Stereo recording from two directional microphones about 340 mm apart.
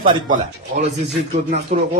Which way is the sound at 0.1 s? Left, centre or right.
Centre.